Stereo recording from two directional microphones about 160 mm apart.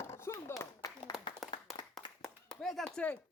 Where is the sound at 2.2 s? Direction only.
Centre (ahead or behind).